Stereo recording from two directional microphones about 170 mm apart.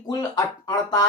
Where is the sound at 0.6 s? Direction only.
25° left (ahead or behind).